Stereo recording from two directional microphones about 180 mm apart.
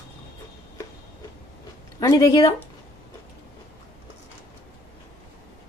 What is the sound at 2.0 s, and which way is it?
Speech, 20° left (ahead or behind).